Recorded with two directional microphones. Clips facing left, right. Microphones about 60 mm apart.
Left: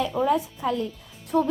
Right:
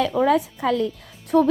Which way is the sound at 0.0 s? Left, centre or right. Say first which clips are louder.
Right 4 dB; right.